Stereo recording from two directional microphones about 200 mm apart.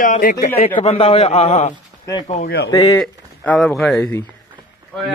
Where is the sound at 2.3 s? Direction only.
50° left (ahead or behind).